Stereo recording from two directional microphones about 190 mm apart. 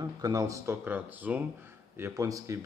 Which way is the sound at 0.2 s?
15° right (ahead or behind).